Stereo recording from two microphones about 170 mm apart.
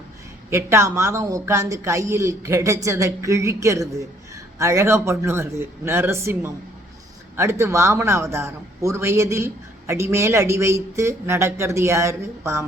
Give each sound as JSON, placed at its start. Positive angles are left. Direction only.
{"t": 0.5, "sound": "a man's voice", "side_deg": -15}